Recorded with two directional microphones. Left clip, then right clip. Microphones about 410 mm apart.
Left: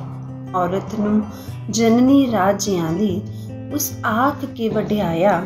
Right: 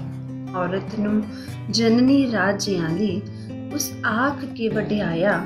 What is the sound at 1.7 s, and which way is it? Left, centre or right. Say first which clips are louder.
Speech: left 3 dB; centre.